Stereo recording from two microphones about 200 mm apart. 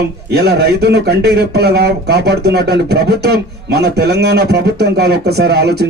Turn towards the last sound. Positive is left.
turn(degrees=-55)  # may be behind; listen again after turning